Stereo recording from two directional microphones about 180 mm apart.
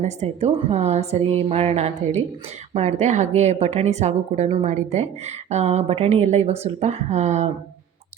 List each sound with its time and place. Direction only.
0.0 s a woman's voice: 40° right (ahead or behind)